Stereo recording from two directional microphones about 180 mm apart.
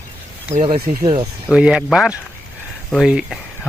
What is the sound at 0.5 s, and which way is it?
Speech, 45° right (ahead or behind).